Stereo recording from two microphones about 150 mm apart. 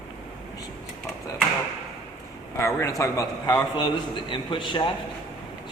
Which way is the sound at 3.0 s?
25° left (ahead or behind).